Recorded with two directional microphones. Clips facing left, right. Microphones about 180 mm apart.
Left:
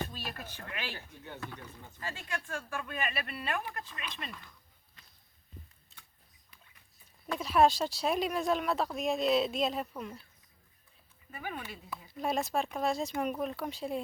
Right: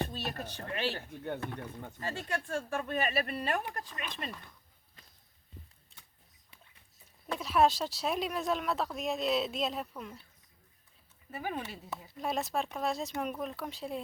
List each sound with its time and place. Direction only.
0.0 s speech: 40° right (ahead or behind)
0.9 s speech: 55° right (ahead or behind)
2.0 s speech: 40° right (ahead or behind)
7.3 s speech: centre (ahead or behind)
11.3 s speech: 35° right (ahead or behind)
12.2 s speech: centre (ahead or behind)